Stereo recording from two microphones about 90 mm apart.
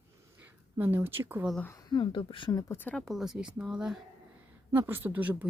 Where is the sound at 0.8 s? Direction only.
25° right (ahead or behind).